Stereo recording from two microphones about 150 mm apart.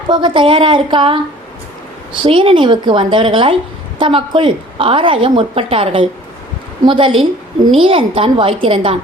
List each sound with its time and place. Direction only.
0.1 s a woman's voice: 30° right (ahead or behind)